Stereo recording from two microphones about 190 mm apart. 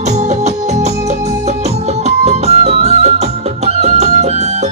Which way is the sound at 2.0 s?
35° right (ahead or behind).